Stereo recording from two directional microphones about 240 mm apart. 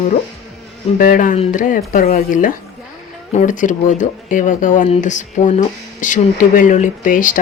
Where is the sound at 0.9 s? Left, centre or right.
Left.